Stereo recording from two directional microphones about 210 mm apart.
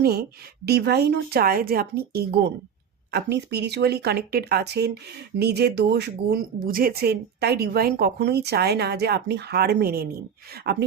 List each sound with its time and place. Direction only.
0.0 s speech: 45° right (ahead or behind)